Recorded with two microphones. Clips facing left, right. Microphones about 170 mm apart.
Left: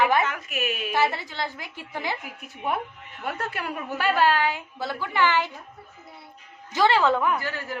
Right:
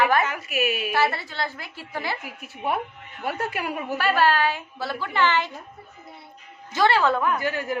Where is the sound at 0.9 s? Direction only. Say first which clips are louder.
Right 1 dB; 15° left (ahead or behind).